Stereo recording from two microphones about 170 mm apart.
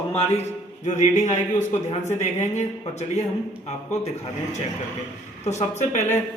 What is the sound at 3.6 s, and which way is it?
A man's voice, 40° left (ahead or behind).